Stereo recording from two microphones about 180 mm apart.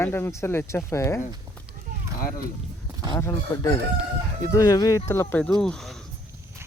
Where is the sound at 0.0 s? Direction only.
15° left (ahead or behind).